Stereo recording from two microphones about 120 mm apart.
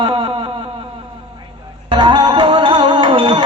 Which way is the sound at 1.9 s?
40° right (ahead or behind).